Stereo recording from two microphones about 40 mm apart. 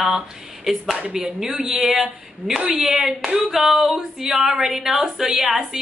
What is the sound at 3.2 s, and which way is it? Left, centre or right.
Clapping, centre.